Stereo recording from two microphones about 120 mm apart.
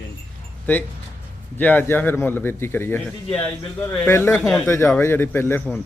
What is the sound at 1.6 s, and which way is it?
Speech, 15° left (ahead or behind).